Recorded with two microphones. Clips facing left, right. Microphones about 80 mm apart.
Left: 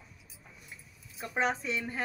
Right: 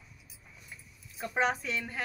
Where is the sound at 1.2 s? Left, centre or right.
Centre.